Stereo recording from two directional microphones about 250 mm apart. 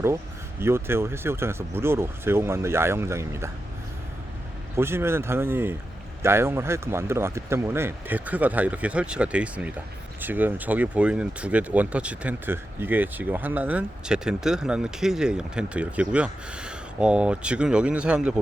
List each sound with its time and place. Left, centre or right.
0.6 s speech: centre
4.8 s speech: centre